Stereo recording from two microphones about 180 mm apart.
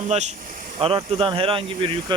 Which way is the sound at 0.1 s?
40° right (ahead or behind).